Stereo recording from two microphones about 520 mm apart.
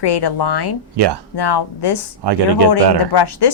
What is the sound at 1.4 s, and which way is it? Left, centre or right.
Speech, left.